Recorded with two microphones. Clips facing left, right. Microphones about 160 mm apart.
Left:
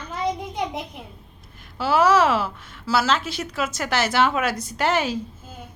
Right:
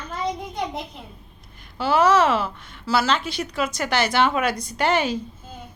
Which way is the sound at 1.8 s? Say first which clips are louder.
Even; 5° left (ahead or behind).